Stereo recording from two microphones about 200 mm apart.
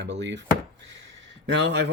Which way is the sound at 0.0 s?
65° right (ahead or behind).